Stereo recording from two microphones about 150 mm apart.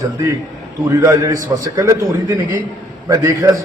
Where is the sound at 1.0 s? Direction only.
20° right (ahead or behind).